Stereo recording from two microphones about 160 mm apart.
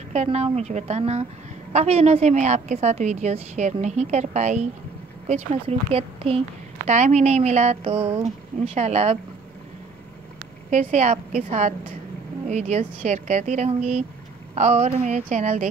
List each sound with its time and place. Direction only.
0.1 s speech: 45° right (ahead or behind)
10.7 s speech: 50° right (ahead or behind)